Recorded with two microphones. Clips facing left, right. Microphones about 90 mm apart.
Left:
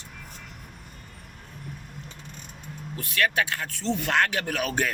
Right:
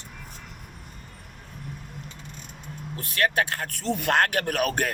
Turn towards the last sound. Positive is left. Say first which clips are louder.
# right 2 dB
turn(degrees=-55)  # may be behind; listen again after turning